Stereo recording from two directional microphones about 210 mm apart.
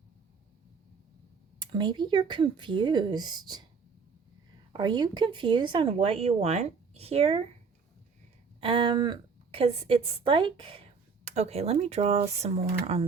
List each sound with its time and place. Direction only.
1.5 s speech: 20° right (ahead or behind)
4.7 s speech: 20° right (ahead or behind)
8.6 s speech: 25° right (ahead or behind)